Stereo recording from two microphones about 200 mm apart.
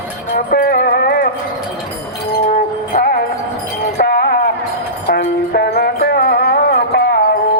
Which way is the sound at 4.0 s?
50° left (ahead or behind).